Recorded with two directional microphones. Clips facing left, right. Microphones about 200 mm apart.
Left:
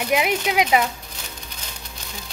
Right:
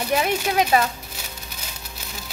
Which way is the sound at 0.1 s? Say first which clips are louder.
Left 1 dB; 10° left (ahead or behind).